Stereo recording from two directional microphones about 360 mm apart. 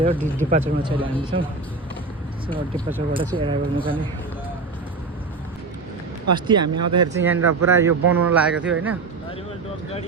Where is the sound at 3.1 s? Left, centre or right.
Centre.